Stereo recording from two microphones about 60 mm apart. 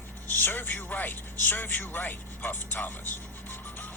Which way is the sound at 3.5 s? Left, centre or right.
Left.